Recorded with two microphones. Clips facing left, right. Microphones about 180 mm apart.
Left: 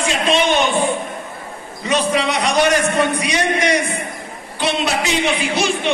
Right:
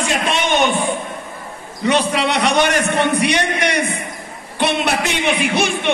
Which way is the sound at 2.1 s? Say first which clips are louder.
Right 1 dB; 65° right (ahead or behind).